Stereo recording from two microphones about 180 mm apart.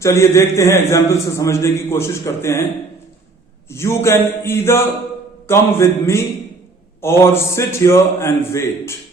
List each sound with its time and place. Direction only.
0.0 s a man's voice: 15° left (ahead or behind)
3.7 s a man's voice: 15° left (ahead or behind)